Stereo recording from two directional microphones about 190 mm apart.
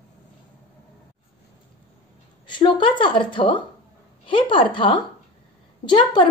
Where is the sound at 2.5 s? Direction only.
25° left (ahead or behind).